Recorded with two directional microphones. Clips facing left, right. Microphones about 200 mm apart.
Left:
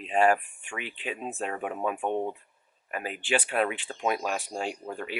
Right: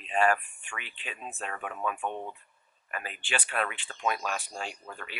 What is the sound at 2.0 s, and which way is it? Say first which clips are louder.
Speech: left 6 dB; 30° left (ahead or behind).